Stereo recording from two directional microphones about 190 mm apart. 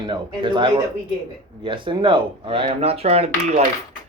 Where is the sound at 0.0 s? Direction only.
25° right (ahead or behind).